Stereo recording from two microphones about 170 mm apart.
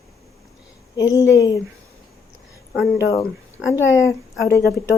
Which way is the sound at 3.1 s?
20° left (ahead or behind).